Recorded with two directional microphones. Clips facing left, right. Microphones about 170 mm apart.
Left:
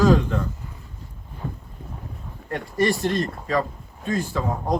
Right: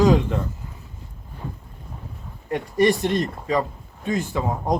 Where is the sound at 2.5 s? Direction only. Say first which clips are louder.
Right 3 dB; 20° right (ahead or behind).